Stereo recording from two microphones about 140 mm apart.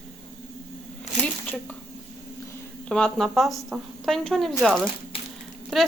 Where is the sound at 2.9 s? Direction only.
5° left (ahead or behind).